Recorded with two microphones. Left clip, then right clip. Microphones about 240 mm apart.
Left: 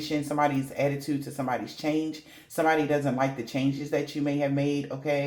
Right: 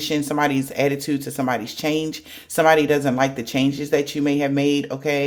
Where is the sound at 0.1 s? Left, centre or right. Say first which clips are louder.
Right 5 dB; right.